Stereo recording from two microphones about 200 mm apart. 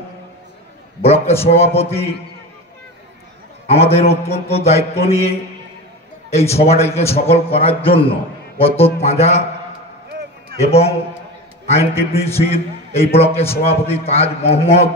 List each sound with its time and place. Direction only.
1.0 s a man's voice: 30° left (ahead or behind)
3.6 s a man's voice: 30° left (ahead or behind)
6.3 s a man's voice: 30° left (ahead or behind)
10.6 s a man's voice: 30° left (ahead or behind)